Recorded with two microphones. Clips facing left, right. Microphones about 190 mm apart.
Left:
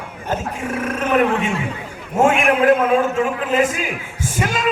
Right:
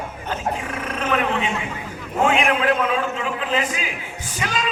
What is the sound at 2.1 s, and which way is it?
A man's voice, 50° left (ahead or behind).